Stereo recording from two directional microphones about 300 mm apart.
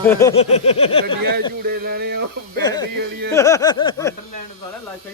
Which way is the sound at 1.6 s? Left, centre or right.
Right.